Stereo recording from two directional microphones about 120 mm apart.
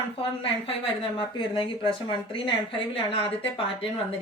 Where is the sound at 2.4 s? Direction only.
50° left (ahead or behind).